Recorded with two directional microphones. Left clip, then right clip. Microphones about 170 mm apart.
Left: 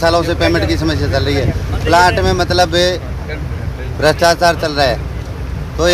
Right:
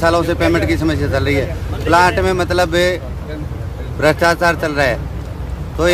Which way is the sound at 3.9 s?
5° right (ahead or behind).